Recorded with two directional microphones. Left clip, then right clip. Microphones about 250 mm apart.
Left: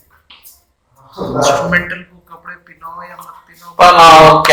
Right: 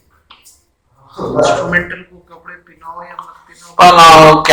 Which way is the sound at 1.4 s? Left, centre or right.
Left.